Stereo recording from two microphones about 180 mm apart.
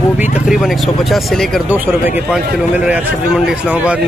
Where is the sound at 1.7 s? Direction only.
10° right (ahead or behind).